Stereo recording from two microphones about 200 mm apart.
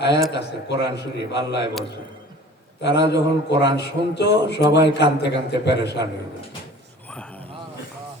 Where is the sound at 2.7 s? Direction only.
60° left (ahead or behind).